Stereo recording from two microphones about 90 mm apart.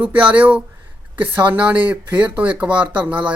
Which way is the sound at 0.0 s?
15° right (ahead or behind).